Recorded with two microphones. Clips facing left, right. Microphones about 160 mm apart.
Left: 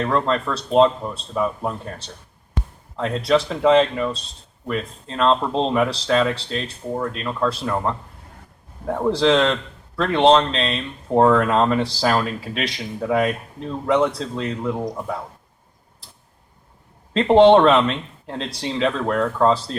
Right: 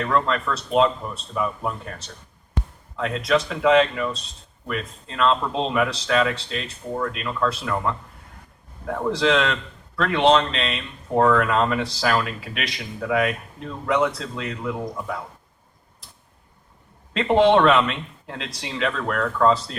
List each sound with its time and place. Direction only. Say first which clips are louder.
0.0 s speech: left 2 dB; 30° left (ahead or behind)
17.2 s speech: left 5 dB; 30° left (ahead or behind)